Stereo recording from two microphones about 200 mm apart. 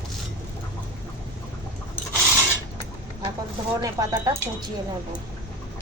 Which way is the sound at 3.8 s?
15° right (ahead or behind).